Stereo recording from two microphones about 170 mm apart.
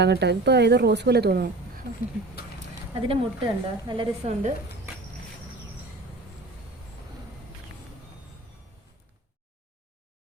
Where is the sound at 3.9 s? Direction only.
30° right (ahead or behind).